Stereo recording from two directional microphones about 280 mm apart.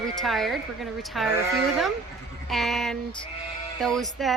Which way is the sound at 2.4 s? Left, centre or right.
Centre.